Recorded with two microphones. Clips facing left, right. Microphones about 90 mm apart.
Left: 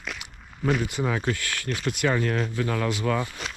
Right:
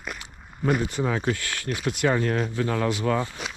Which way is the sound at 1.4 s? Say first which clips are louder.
Even; 25° right (ahead or behind).